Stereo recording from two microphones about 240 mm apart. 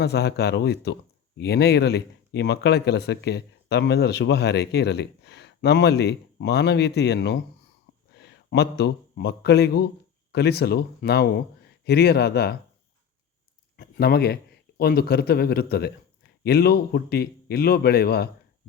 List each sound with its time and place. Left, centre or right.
0.0 s a man's voice: left
13.7 s speech: left